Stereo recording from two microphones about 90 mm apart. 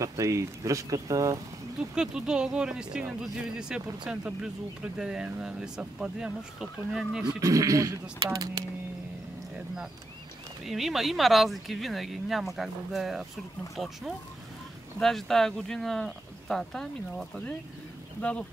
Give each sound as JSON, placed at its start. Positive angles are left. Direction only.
{"t": 0.0, "sound": "speech", "side_deg": -35}
{"t": 2.0, "sound": "speech", "side_deg": -10}
{"t": 7.2, "sound": "speech", "side_deg": -40}
{"t": 10.6, "sound": "speech", "side_deg": 0}
{"t": 15.0, "sound": "speech", "side_deg": 5}